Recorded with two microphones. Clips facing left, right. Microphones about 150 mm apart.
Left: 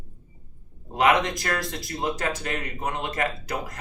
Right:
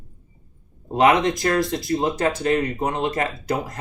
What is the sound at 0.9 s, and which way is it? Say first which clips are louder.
Speech: right 4 dB; 30° right (ahead or behind).